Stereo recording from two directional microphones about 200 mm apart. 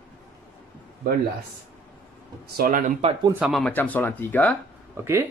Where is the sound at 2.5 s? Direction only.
45° right (ahead or behind).